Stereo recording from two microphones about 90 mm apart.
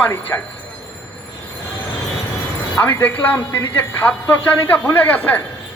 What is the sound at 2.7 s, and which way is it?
A man's voice, 30° left (ahead or behind).